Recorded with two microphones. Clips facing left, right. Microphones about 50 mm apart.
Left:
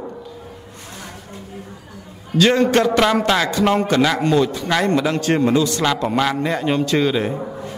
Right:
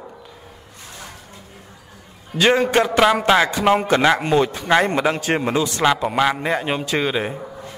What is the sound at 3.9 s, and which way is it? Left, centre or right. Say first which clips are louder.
A man's voice: even; right.